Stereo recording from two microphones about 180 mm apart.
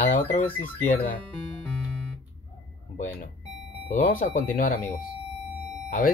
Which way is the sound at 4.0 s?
50° left (ahead or behind).